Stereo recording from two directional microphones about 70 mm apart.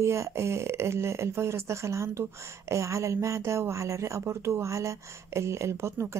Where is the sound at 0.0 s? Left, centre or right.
Right.